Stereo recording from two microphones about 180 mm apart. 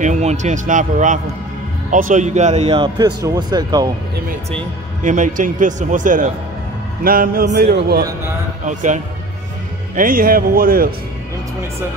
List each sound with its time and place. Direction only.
0.0 s speech: 40° right (ahead or behind)
3.2 s speech: 20° right (ahead or behind)
5.0 s speech: 45° right (ahead or behind)
8.6 s speech: 45° right (ahead or behind)